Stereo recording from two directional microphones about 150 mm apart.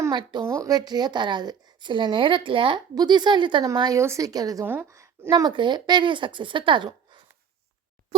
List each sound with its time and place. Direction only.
0.0 s a woman's voice: 30° right (ahead or behind)
4.6 s speech: 15° right (ahead or behind); by 7.2 s 30° right (ahead or behind)